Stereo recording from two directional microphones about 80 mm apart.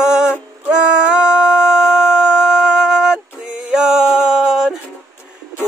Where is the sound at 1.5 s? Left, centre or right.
Left.